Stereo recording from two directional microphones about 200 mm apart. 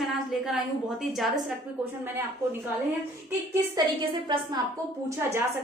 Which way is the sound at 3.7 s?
20° right (ahead or behind).